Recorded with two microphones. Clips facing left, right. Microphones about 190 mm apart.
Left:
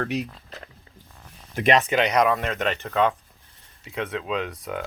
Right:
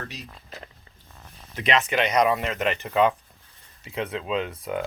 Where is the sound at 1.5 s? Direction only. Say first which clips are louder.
Left 4 dB; 45° left (ahead or behind).